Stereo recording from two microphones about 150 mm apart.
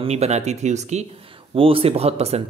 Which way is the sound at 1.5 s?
40° right (ahead or behind).